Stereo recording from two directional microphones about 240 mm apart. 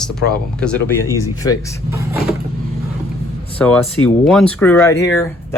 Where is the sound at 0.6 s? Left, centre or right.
Centre.